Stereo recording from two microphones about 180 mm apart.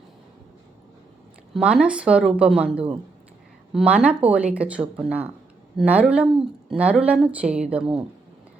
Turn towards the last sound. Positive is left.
turn(degrees=-5)  # may be behind; listen again after turning